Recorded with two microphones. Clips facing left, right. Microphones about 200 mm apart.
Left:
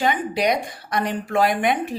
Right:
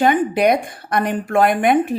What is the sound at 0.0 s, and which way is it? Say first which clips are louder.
A woman's voice: right 6 dB; 55° right (ahead or behind).